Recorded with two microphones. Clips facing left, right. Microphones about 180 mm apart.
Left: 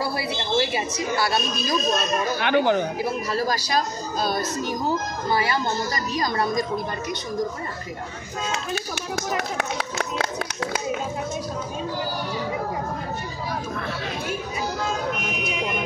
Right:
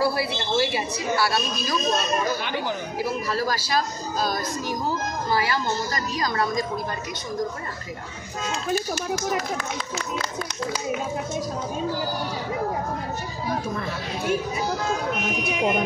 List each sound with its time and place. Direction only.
0.0 s a woman's voice: 20° left (ahead or behind)
2.3 s speech: 65° left (ahead or behind)
3.4 s speech: 20° left (ahead or behind)
5.3 s speech: 25° left (ahead or behind)
9.6 s speech: 70° left (ahead or behind)